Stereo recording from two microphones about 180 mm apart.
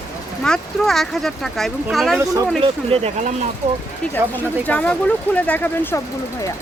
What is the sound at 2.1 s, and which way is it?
Speech, 15° right (ahead or behind).